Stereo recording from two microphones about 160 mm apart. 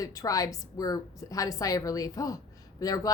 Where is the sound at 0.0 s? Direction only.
20° left (ahead or behind).